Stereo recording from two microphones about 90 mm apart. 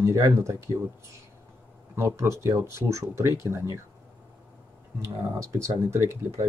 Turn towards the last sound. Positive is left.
turn(degrees=-30)  # may be behind; listen again after turning